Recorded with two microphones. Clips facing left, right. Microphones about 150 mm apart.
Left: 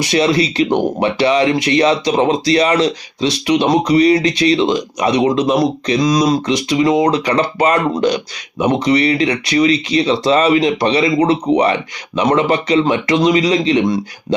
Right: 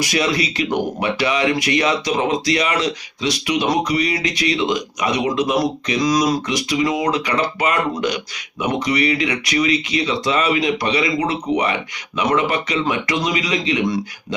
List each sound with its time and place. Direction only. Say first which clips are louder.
0.0 s speech: left 6 dB; 30° left (ahead or behind)